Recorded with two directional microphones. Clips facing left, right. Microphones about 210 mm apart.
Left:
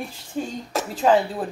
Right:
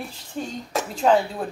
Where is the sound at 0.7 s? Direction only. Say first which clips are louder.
Left 1 dB; 5° left (ahead or behind).